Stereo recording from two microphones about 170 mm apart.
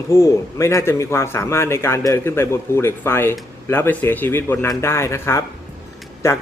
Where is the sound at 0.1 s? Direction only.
15° left (ahead or behind).